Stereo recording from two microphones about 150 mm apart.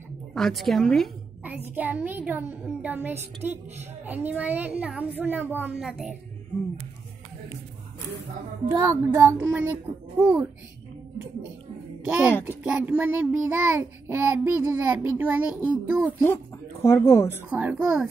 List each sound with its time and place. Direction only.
0.3 s a woman's voice: centre (ahead or behind)
1.4 s a child's voice: 10° right (ahead or behind)
5.8 s a woman's voice: centre (ahead or behind)
8.8 s a child's voice: 15° right (ahead or behind)
12.0 s a sound: 10° right (ahead or behind)
12.4 s a child's voice: 10° right (ahead or behind)
16.8 s speech: 20° left (ahead or behind)
17.4 s a child's voice: 10° right (ahead or behind)